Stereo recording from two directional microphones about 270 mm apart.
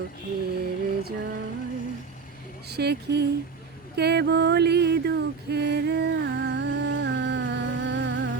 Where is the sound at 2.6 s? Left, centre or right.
Right.